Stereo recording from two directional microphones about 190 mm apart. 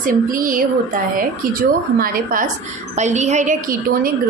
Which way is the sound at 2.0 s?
45° right (ahead or behind).